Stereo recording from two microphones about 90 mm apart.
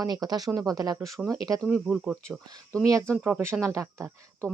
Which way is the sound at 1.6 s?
10° right (ahead or behind).